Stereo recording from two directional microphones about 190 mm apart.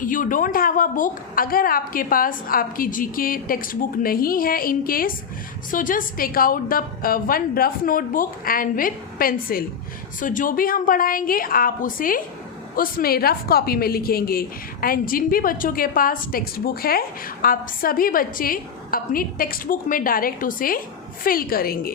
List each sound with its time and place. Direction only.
0.0 s a woman's voice: 45° left (ahead or behind)